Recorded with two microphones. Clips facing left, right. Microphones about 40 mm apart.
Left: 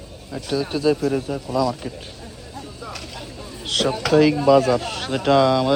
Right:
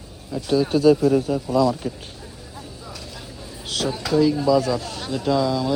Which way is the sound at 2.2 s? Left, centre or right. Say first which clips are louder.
Left 2 dB; centre.